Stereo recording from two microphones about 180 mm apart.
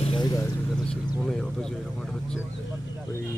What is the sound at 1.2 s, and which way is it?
Speech, 5° left (ahead or behind).